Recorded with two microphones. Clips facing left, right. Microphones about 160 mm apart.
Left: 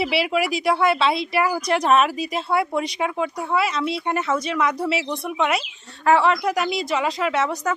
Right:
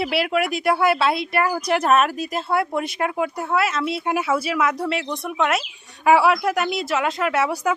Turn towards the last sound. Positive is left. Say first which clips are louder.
# right 1 dB
turn(degrees=-10)  # may be behind; listen again after turning